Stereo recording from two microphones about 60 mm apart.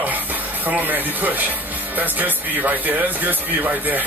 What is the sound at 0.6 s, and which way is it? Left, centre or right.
Speech, right.